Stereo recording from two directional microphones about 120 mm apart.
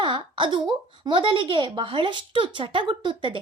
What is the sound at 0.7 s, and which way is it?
A woman's voice, 40° right (ahead or behind).